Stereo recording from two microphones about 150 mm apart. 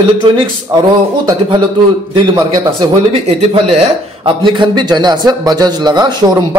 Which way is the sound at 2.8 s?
45° right (ahead or behind).